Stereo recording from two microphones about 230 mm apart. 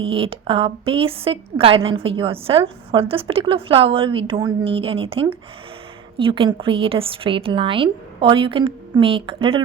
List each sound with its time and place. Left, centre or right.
0.0 s a woman's voice: right